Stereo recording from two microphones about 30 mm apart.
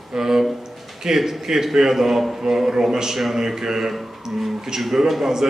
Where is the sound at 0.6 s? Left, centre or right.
Centre.